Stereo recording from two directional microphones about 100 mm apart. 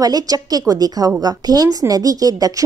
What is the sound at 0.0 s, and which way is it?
Speech, 40° right (ahead or behind).